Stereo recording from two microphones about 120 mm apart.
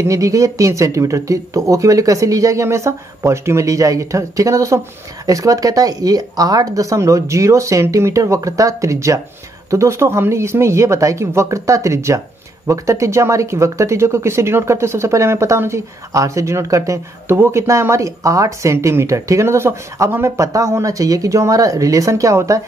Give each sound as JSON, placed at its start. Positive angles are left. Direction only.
{"t": 0.0, "sound": "speech", "side_deg": -25}